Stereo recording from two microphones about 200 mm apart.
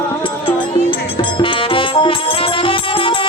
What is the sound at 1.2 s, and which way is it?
Music, 25° left (ahead or behind).